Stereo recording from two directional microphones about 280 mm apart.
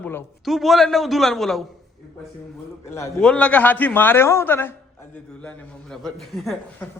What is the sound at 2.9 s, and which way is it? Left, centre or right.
A man's voice, centre.